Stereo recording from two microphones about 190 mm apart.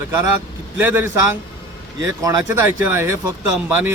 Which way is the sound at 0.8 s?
10° right (ahead or behind).